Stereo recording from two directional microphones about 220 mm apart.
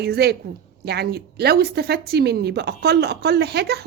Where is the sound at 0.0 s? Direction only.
45° right (ahead or behind).